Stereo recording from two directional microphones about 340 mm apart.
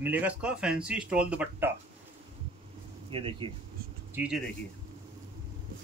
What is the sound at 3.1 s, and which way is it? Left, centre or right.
Speech, centre.